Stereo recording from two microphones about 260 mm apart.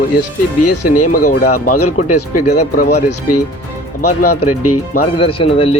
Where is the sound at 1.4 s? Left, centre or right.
Left.